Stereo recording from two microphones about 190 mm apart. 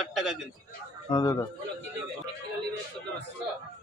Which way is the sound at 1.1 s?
20° left (ahead or behind).